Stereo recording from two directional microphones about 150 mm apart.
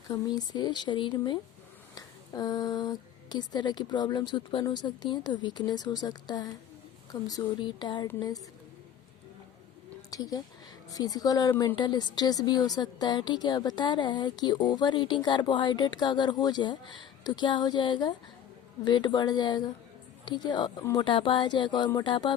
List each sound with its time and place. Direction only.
0.1 s a woman's voice: 25° left (ahead or behind)
10.1 s a woman's voice: 25° left (ahead or behind)
21.0 s a sound: 35° left (ahead or behind)
21.8 s a woman's voice: 30° left (ahead or behind)